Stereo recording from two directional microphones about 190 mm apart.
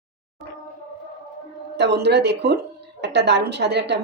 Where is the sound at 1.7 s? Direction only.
60° right (ahead or behind).